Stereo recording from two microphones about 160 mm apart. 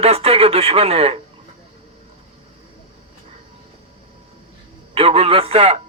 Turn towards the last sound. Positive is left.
turn(degrees=-35)  # may be behind; listen again after turning